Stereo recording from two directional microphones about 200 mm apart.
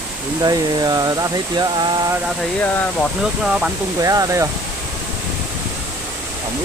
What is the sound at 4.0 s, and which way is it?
Speech, 15° right (ahead or behind).